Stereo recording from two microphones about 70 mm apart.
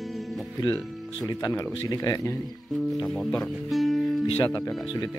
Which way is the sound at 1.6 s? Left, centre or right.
Left.